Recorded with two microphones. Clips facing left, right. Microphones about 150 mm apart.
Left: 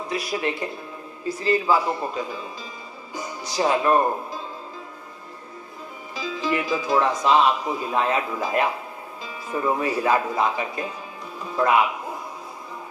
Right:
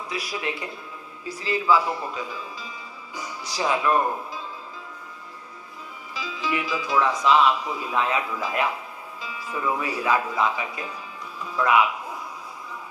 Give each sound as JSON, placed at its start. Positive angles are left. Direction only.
{"t": 0.1, "sound": "speech", "side_deg": 45}
{"t": 3.6, "sound": "speech", "side_deg": 40}
{"t": 6.1, "sound": "speech", "side_deg": 45}